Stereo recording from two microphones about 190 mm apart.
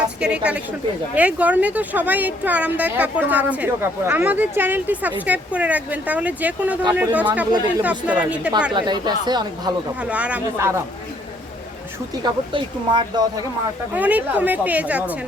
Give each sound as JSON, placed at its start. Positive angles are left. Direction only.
{"t": 0.2, "sound": "a woman's voice", "side_deg": -5}
{"t": 8.7, "sound": "speech", "side_deg": -20}
{"t": 10.0, "sound": "speech", "side_deg": -5}
{"t": 12.2, "sound": "speech", "side_deg": -25}
{"t": 13.9, "sound": "speech", "side_deg": -10}